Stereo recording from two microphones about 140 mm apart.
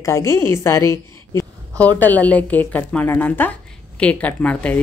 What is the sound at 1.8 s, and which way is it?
A woman's voice, 10° left (ahead or behind).